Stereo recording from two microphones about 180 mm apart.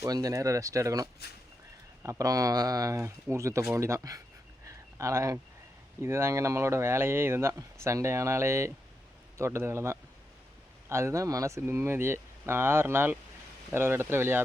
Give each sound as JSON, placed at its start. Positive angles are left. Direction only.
{"t": 0.0, "sound": "speech", "side_deg": -20}
{"t": 2.0, "sound": "speech", "side_deg": -20}
{"t": 4.6, "sound": "a sound", "side_deg": -15}
{"t": 6.0, "sound": "a man's voice", "side_deg": -15}